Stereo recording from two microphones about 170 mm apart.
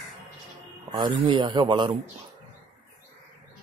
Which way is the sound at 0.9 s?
30° right (ahead or behind).